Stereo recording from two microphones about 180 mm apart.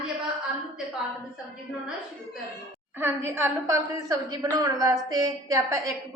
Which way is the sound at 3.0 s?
15° right (ahead or behind).